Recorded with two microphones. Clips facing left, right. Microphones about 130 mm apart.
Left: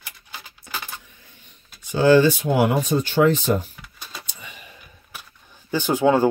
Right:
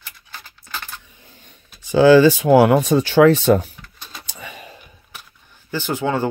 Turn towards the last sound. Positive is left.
turn(degrees=10)  # may be behind; listen again after turning